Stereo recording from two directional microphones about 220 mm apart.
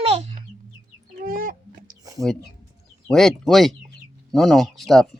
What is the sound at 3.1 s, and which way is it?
Speech, centre (ahead or behind).